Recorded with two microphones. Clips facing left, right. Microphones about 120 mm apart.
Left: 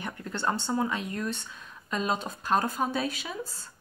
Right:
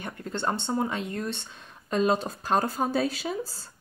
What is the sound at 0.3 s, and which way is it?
Speech, 25° right (ahead or behind).